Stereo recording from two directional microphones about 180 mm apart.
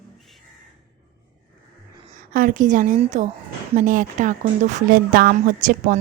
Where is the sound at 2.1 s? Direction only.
50° right (ahead or behind).